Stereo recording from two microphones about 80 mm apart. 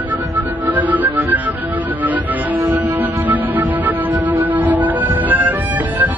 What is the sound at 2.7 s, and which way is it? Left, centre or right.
Music, right.